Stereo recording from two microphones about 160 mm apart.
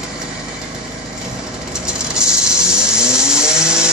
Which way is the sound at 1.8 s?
5° right (ahead or behind).